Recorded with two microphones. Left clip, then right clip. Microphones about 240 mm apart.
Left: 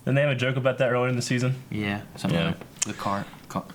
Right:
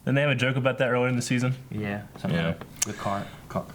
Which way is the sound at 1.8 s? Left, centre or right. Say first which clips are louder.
Left 2 dB; right.